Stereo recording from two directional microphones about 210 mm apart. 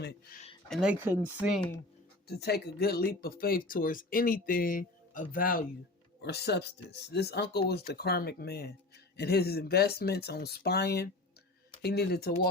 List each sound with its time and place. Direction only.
0.0 s speech: 50° left (ahead or behind)
0.7 s speech: 5° right (ahead or behind)
2.2 s speech: 50° left (ahead or behind)